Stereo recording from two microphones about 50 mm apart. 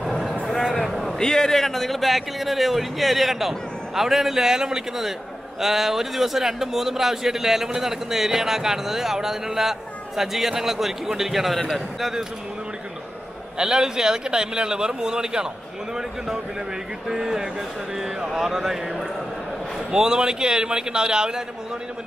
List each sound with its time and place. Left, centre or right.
0.5 s a man's voice: centre
13.6 s speech: centre
17.1 s speech: centre